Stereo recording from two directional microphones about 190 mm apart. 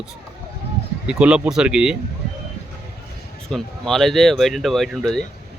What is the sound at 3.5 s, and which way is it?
Speech, centre (ahead or behind).